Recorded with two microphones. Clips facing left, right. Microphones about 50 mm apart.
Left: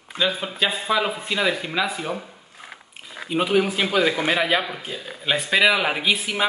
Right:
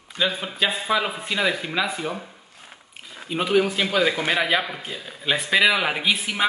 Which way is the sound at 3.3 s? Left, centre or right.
Centre.